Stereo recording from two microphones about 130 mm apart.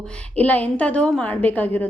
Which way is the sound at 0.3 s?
10° left (ahead or behind).